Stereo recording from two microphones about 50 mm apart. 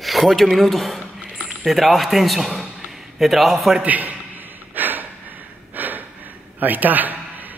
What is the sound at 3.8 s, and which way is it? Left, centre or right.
Speech, right.